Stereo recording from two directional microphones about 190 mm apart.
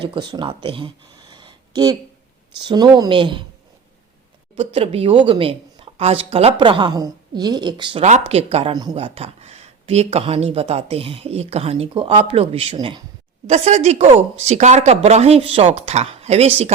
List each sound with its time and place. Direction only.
0.0 s speech: 25° right (ahead or behind)
1.3 s a sound: 25° right (ahead or behind)
2.6 s speech: 20° right (ahead or behind)
4.5 s speech: 30° right (ahead or behind)
8.7 s speech: 20° right (ahead or behind)
13.5 s speech: 35° right (ahead or behind)